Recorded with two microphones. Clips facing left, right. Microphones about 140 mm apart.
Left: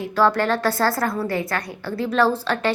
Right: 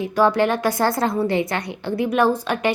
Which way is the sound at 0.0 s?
15° right (ahead or behind).